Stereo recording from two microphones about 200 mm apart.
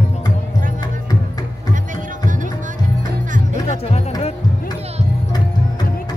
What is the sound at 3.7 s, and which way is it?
Music, 30° left (ahead or behind).